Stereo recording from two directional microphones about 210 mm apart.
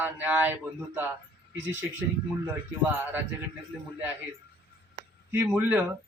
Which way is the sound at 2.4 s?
10° right (ahead or behind).